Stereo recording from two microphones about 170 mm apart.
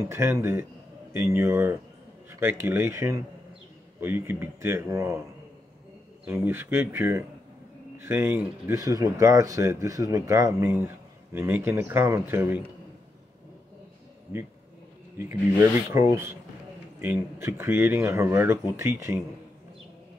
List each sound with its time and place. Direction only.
0.0 s speech: 15° right (ahead or behind)
6.2 s speech: 15° right (ahead or behind)
15.9 s speech: 15° right (ahead or behind)